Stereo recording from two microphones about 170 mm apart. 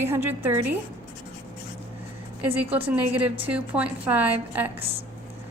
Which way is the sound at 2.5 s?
10° right (ahead or behind).